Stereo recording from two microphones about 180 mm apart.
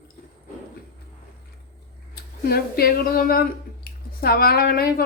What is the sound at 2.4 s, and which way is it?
A woman's voice, 60° left (ahead or behind).